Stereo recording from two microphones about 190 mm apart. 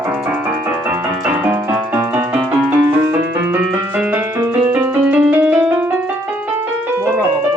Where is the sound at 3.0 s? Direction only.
10° right (ahead or behind).